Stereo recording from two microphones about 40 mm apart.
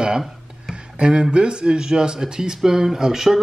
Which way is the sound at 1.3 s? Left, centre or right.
Right.